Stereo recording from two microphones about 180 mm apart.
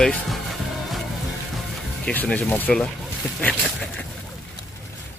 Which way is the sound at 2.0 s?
5° left (ahead or behind).